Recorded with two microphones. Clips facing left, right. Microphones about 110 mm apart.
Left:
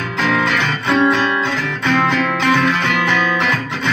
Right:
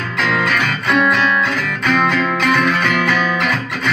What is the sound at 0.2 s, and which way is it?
Music, 25° left (ahead or behind).